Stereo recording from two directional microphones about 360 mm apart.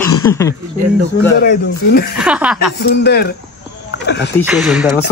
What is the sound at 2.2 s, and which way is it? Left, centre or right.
Speech, centre.